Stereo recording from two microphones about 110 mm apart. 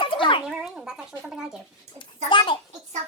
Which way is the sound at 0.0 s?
50° left (ahead or behind).